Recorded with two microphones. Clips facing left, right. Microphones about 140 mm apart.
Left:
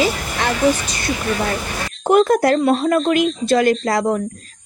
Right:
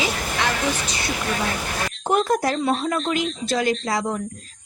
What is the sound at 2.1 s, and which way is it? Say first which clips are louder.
A woman's voice: left 7 dB; 65° left (ahead or behind).